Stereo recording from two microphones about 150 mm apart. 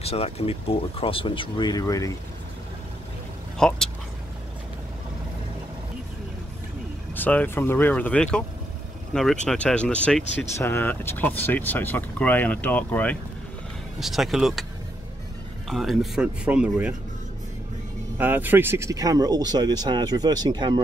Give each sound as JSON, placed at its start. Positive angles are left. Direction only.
{"t": 0.0, "sound": "speech", "side_deg": 40}
{"t": 3.5, "sound": "speech", "side_deg": 5}
{"t": 7.2, "sound": "speech", "side_deg": 10}
{"t": 13.9, "sound": "speech", "side_deg": 0}
{"t": 15.7, "sound": "speech", "side_deg": 0}
{"t": 18.1, "sound": "speech", "side_deg": -10}